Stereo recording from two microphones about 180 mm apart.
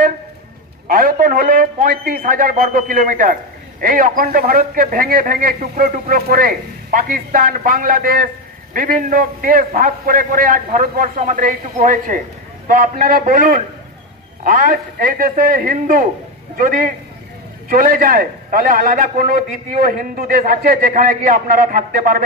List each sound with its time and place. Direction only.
0.8 s a man's voice: 50° right (ahead or behind)